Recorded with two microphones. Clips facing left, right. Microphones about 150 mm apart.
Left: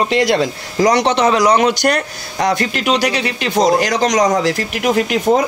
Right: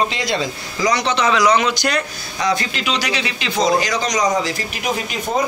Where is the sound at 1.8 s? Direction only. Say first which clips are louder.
Left 5 dB; 55° left (ahead or behind).